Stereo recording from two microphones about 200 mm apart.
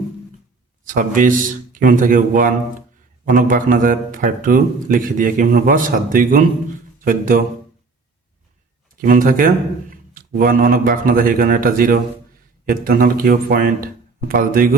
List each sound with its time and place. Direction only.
0.9 s a man's voice: 40° right (ahead or behind)
9.0 s a man's voice: 45° right (ahead or behind)